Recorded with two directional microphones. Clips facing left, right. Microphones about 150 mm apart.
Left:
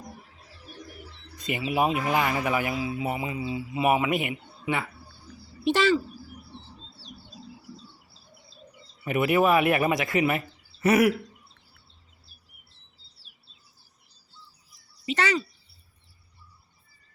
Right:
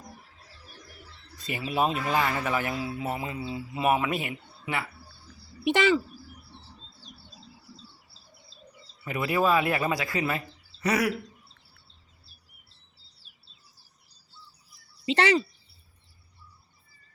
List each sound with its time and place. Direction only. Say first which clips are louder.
1.4 s speech: left 2 dB; 20° left (ahead or behind)
5.6 s speech: left 1 dB; 15° right (ahead or behind)
9.0 s speech: left 3 dB; 20° left (ahead or behind)
15.0 s speech: right 3 dB; 30° right (ahead or behind)